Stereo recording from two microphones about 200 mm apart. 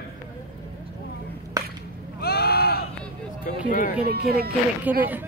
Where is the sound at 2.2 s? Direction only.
50° left (ahead or behind).